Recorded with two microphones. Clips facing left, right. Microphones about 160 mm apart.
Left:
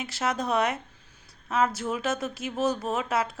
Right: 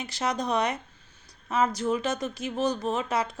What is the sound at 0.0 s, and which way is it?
Speech, 5° left (ahead or behind).